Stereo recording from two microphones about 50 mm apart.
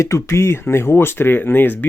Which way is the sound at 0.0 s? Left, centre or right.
Left.